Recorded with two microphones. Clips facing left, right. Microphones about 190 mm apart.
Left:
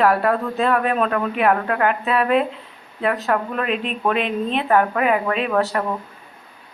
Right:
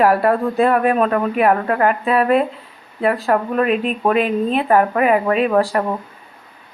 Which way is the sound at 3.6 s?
45° right (ahead or behind).